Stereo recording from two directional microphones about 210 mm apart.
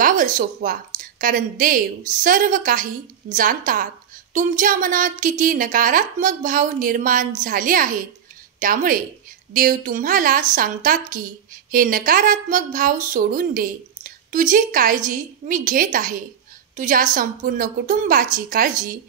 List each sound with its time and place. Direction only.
0.0 s a woman's voice: 40° right (ahead or behind)